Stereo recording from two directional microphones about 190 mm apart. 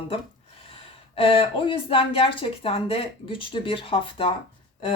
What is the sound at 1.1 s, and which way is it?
Speech, 30° left (ahead or behind).